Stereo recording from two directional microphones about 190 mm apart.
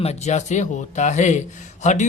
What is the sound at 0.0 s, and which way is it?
Speech, 35° left (ahead or behind).